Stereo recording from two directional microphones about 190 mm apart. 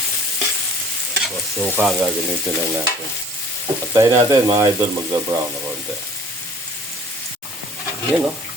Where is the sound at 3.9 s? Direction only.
20° right (ahead or behind).